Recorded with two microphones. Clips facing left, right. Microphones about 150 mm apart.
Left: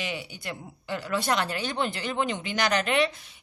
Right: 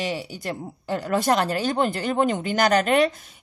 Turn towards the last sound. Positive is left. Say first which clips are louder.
# right 6 dB
turn(degrees=-45)  # may be behind; listen again after turning